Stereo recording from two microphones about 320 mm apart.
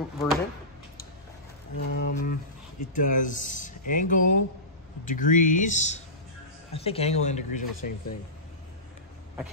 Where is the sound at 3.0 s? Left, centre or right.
Left.